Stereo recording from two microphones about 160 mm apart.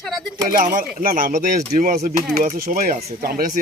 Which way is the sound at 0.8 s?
60° right (ahead or behind).